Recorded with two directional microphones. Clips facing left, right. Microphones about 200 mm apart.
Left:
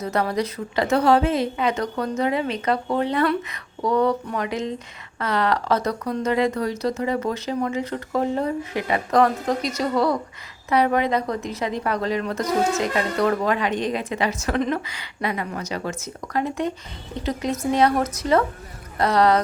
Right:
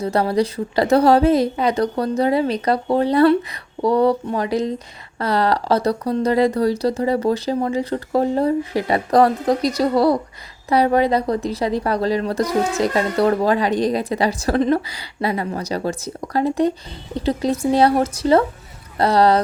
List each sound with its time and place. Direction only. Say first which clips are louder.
0.0 s a woman's voice: right 5 dB; 30° right (ahead or behind)